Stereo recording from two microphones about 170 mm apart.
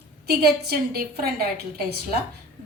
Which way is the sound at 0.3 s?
65° right (ahead or behind).